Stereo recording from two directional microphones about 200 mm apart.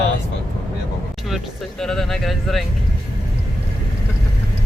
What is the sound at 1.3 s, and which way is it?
Speech, centre (ahead or behind).